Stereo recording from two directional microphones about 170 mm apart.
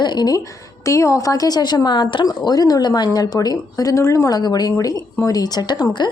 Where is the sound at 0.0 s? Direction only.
25° left (ahead or behind).